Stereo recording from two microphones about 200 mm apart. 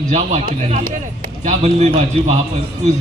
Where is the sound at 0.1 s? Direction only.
35° right (ahead or behind).